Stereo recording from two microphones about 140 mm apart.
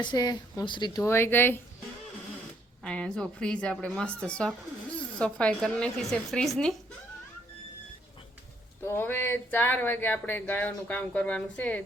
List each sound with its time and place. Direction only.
0.0 s speech: 30° left (ahead or behind)
1.0 s speech: 15° left (ahead or behind)
2.8 s a woman's voice: 5° left (ahead or behind)
8.8 s speech: 15° left (ahead or behind)